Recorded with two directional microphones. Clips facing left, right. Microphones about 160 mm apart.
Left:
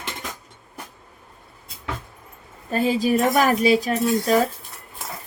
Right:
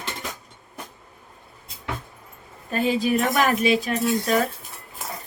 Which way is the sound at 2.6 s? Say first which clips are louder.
Left 2 dB; 40° left (ahead or behind).